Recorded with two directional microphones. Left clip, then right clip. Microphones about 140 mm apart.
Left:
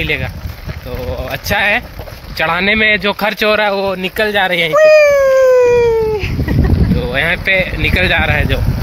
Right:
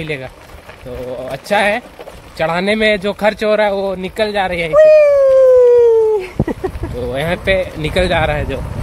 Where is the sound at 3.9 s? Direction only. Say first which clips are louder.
Left 3 dB; 25° left (ahead or behind).